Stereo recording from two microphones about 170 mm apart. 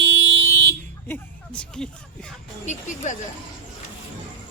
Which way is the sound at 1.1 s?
5° left (ahead or behind).